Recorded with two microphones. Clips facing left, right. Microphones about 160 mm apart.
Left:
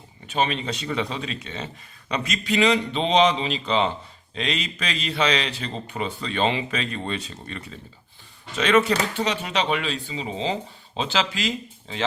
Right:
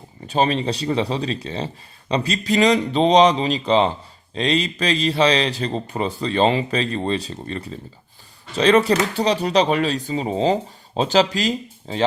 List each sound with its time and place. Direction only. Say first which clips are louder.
0.3 s speech: right 5 dB; 35° right (ahead or behind)